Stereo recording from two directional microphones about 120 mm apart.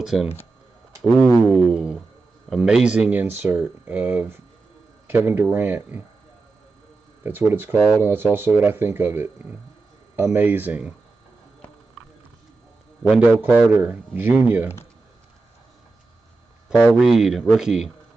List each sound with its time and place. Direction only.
0.0 s speech: 5° right (ahead or behind)
1.4 s a sound: centre (ahead or behind)
2.5 s speech: 5° right (ahead or behind)
7.2 s speech: 15° right (ahead or behind)
13.2 s speech: 15° right (ahead or behind)
16.9 s speech: 5° right (ahead or behind)